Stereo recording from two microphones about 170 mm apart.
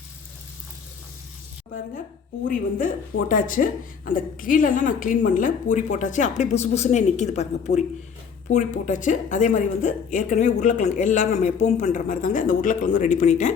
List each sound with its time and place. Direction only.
2.5 s a woman's voice: 50° left (ahead or behind)